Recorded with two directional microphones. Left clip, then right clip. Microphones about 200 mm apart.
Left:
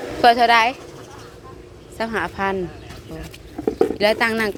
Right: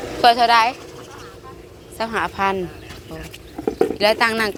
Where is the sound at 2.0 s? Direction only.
15° left (ahead or behind).